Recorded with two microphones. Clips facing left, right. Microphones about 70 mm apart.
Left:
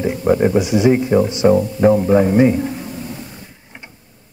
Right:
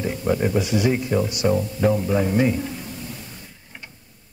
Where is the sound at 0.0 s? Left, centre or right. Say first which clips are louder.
Left 7 dB; left.